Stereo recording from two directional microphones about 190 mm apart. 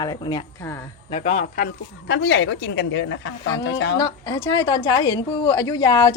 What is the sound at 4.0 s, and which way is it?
A woman's voice, 20° left (ahead or behind).